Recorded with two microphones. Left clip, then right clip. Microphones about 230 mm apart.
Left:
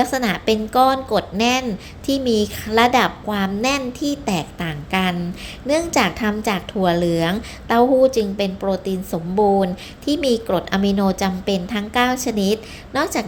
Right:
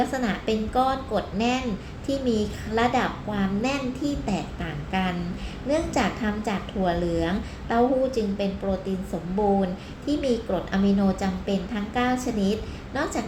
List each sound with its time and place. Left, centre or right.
0.0 s a woman's voice: left